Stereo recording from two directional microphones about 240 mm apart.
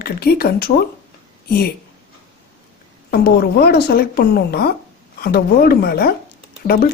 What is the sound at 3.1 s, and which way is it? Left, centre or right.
A woman's voice, left.